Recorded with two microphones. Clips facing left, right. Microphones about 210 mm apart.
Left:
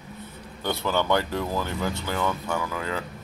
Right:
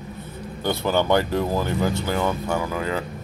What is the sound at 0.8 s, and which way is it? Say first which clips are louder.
Speech: right 4 dB; 40° right (ahead or behind).